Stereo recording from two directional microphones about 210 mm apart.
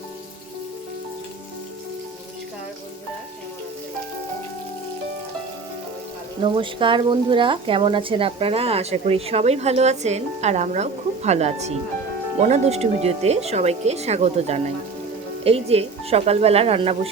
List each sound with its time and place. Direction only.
6.4 s speech: 25° right (ahead or behind)